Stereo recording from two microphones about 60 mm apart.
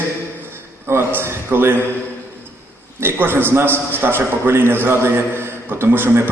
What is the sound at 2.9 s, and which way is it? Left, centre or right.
A man's voice, right.